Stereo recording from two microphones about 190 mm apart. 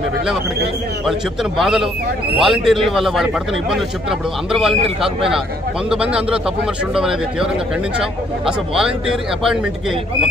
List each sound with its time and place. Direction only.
1.6 s a man's voice: centre (ahead or behind)
5.9 s a man's voice: 5° right (ahead or behind)